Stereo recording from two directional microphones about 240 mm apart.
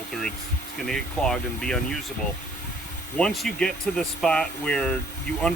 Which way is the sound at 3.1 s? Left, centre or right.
Centre.